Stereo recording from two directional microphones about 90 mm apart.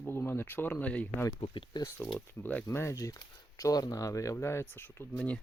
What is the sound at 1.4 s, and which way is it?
Speech, 75° left (ahead or behind).